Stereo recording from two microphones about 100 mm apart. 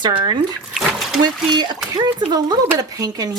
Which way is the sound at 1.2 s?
45° right (ahead or behind).